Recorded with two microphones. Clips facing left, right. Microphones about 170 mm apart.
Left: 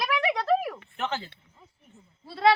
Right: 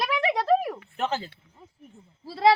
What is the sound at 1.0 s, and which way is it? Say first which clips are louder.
Speech: right 3 dB; 35° right (ahead or behind).